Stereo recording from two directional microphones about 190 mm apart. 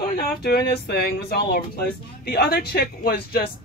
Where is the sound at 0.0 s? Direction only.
50° left (ahead or behind).